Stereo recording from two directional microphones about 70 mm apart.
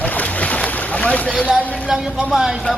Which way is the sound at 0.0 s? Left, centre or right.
Left.